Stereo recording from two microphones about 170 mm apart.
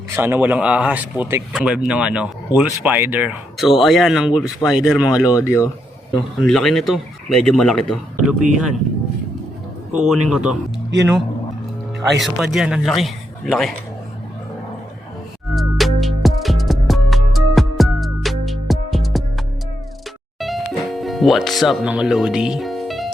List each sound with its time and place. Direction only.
0.2 s speech: 10° right (ahead or behind)
5.4 s speech: 15° left (ahead or behind)
6.4 s speech: centre (ahead or behind)
10.1 s speech: 5° right (ahead or behind)
12.0 s speech: centre (ahead or behind)
15.5 s music: centre (ahead or behind)
20.4 s music: centre (ahead or behind)